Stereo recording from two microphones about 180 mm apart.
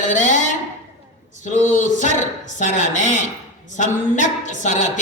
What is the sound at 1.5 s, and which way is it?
A man's voice, 45° left (ahead or behind).